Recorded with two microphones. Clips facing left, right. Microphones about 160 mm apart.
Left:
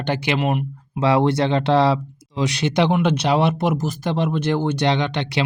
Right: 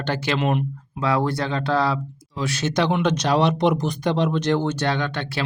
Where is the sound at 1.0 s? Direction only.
25° left (ahead or behind).